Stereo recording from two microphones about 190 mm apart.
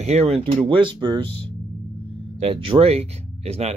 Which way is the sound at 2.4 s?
30° right (ahead or behind).